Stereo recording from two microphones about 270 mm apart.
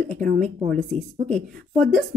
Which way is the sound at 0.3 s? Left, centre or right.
Right.